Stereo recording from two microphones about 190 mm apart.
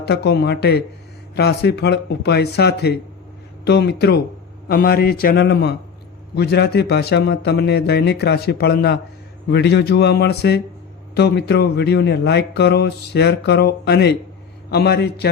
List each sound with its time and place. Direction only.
0.0 s speech: 60° left (ahead or behind)